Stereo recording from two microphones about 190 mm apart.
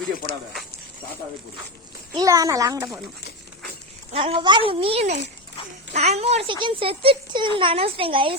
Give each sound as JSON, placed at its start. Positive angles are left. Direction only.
{"t": 2.1, "sound": "speech", "side_deg": -20}
{"t": 4.1, "sound": "a child's voice", "side_deg": -30}